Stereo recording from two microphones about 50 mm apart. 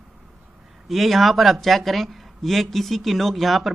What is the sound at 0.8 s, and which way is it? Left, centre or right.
Speech, centre.